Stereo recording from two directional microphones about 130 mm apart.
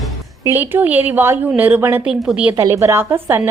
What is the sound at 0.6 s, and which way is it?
A woman's voice, 15° right (ahead or behind).